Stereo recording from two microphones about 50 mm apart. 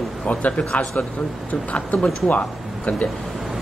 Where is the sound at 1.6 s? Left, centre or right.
Left.